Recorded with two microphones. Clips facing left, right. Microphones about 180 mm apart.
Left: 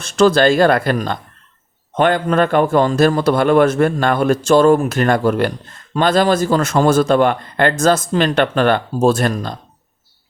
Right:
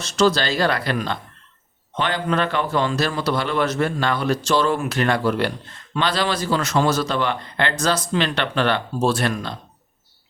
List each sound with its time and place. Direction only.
0.0 s a man's voice: 55° left (ahead or behind)